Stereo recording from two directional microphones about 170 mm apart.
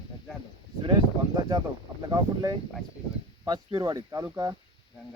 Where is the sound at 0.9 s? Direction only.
25° right (ahead or behind).